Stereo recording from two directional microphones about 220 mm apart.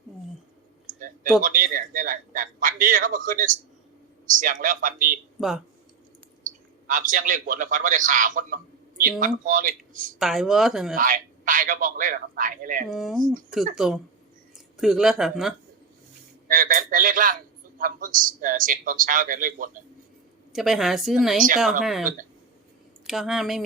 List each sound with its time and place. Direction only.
0.9 s a sound: 40° right (ahead or behind)
1.4 s a man's voice: 40° right (ahead or behind)
6.4 s a man's voice: 35° right (ahead or behind)
10.2 s a woman's voice: centre (ahead or behind)
10.9 s a man's voice: 40° right (ahead or behind)
12.9 s a woman's voice: centre (ahead or behind)
16.5 s a man's voice: 40° right (ahead or behind)
20.5 s a woman's voice: centre (ahead or behind)
23.0 s a woman's voice: centre (ahead or behind)